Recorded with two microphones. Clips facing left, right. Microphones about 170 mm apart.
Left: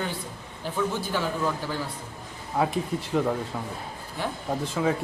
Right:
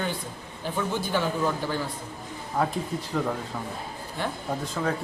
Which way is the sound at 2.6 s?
5° left (ahead or behind).